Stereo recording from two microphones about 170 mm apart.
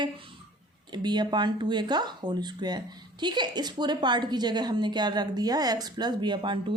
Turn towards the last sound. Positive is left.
turn(degrees=-25)  # may be behind; listen again after turning